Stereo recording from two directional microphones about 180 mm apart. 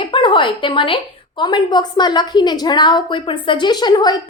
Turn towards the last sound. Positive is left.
turn(degrees=25)  # may be behind; listen again after turning